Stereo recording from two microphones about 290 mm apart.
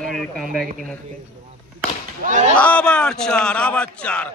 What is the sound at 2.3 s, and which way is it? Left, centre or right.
Speech, right.